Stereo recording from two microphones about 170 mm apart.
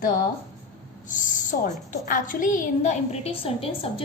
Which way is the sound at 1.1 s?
50° left (ahead or behind).